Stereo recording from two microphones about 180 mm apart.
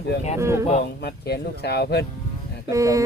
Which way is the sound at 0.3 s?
15° right (ahead or behind).